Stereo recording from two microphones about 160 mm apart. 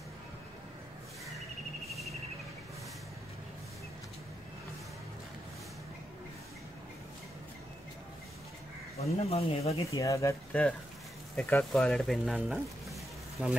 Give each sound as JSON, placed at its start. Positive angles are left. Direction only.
{"t": 8.9, "sound": "speech", "side_deg": 40}
{"t": 9.9, "sound": "speech", "side_deg": 20}
{"t": 10.5, "sound": "speech", "side_deg": 10}
{"t": 11.7, "sound": "speech", "side_deg": 0}